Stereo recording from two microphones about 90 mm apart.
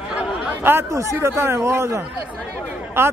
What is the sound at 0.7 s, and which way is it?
Speech, 25° right (ahead or behind).